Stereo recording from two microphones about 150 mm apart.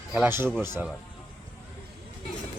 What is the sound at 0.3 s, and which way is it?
Speech, 15° right (ahead or behind).